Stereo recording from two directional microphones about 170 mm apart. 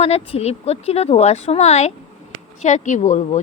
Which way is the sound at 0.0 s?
35° left (ahead or behind).